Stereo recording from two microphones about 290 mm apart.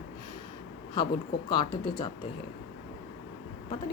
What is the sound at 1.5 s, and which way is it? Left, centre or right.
Speech, centre.